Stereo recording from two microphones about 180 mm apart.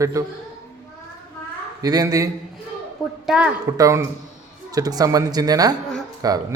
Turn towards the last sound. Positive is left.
turn(degrees=-20)  # may be behind; listen again after turning